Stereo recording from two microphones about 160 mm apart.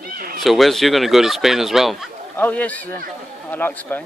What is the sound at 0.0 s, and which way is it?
Cat, 65° right (ahead or behind).